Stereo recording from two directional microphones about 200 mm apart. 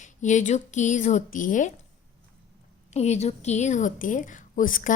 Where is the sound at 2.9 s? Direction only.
35° left (ahead or behind).